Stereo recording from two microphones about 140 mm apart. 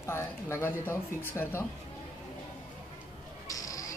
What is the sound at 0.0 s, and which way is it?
A woman's voice, 15° left (ahead or behind).